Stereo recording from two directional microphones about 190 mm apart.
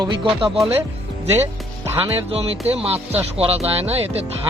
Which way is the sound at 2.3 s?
30° right (ahead or behind).